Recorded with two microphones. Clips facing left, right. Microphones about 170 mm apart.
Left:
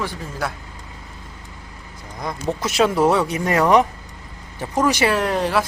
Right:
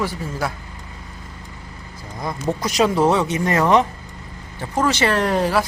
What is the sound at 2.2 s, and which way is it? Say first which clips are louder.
Speech: right 1 dB; centre (ahead or behind).